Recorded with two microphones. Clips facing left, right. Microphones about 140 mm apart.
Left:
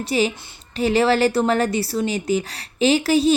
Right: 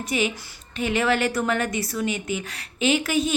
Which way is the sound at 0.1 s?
35° left (ahead or behind).